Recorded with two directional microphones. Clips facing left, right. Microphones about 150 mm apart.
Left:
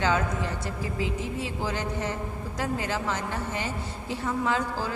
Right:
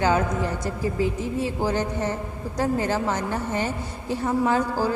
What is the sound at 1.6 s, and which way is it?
A man's voice, 45° right (ahead or behind).